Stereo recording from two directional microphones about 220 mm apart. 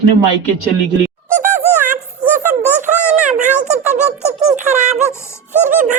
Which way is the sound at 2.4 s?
35° right (ahead or behind).